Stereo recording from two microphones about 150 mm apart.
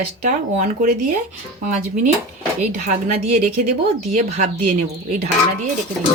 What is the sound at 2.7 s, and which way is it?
A woman's voice, 55° right (ahead or behind).